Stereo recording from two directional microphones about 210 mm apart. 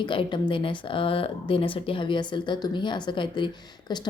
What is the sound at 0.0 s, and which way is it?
A woman's voice, 25° left (ahead or behind).